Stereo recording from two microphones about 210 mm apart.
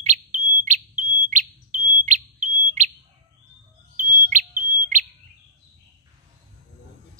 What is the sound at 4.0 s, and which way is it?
Bird, 40° right (ahead or behind).